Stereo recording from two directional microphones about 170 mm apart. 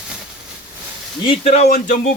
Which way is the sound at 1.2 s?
35° left (ahead or behind).